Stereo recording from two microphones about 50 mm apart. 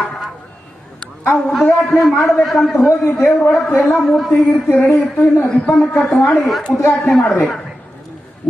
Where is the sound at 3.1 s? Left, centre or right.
Left.